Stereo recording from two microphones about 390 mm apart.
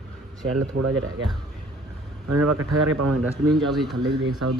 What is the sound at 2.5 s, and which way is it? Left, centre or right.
Speech, right.